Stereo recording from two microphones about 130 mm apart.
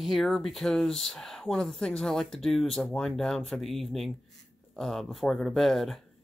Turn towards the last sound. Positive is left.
turn(degrees=0)  # may be behind; listen again after turning